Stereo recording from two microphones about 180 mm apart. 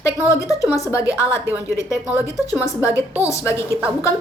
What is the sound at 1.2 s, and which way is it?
Speech, 15° left (ahead or behind).